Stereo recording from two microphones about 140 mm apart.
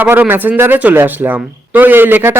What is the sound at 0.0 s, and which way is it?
Speech, 15° right (ahead or behind).